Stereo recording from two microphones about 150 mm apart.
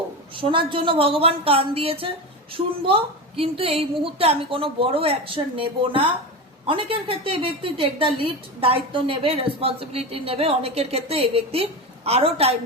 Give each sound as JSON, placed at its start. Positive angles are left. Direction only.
{"t": 0.3, "sound": "a woman's voice", "side_deg": -35}